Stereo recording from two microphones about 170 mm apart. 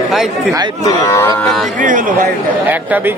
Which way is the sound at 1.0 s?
15° left (ahead or behind).